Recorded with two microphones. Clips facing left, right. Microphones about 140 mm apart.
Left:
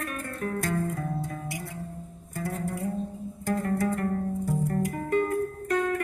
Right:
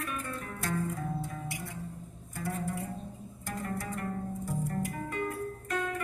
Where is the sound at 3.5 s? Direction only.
60° left (ahead or behind).